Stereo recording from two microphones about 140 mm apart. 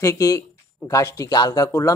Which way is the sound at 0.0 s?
25° left (ahead or behind).